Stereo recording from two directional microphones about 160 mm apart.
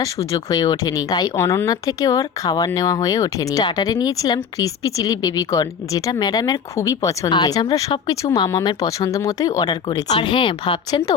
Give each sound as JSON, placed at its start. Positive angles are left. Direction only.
{"t": 0.0, "sound": "a woman's voice", "side_deg": 20}